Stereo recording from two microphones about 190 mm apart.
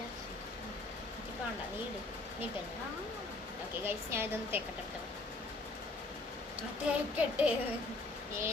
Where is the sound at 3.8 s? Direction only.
10° right (ahead or behind).